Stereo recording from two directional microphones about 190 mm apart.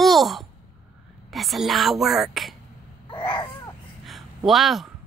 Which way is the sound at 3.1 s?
25° left (ahead or behind).